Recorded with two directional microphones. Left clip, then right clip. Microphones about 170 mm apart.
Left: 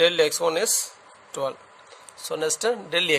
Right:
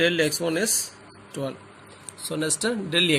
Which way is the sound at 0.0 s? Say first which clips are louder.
Left 3 dB; 65° left (ahead or behind).